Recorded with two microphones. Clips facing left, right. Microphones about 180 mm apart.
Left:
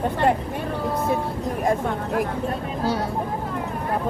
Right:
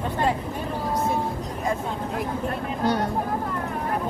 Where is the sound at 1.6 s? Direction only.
55° left (ahead or behind).